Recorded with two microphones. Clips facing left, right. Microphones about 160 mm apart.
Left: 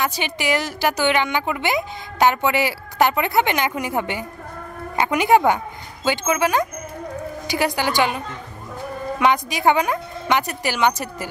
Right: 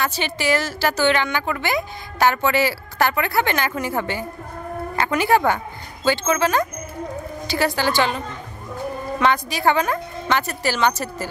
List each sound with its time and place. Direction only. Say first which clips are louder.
0.0 s a woman's voice: even; 15° left (ahead or behind)
9.2 s a woman's voice: left 1 dB; 15° left (ahead or behind)